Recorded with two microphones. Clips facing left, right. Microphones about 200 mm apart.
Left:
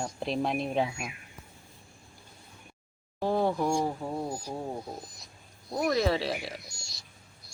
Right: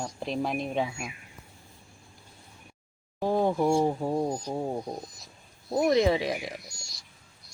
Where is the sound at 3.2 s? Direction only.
15° right (ahead or behind).